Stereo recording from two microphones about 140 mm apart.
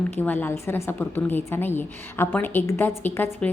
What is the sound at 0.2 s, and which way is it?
A woman's voice, 15° left (ahead or behind).